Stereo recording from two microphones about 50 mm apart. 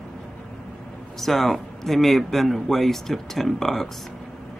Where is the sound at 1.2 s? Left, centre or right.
Centre.